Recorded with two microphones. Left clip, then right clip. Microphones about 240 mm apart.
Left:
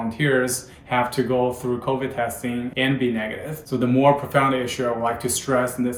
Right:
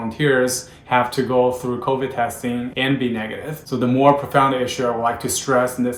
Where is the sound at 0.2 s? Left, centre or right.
Centre.